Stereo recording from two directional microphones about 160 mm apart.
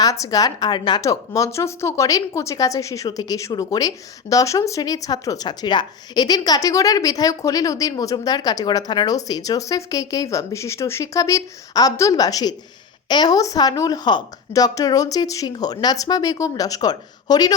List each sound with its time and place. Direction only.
0.0 s a woman's voice: 20° left (ahead or behind)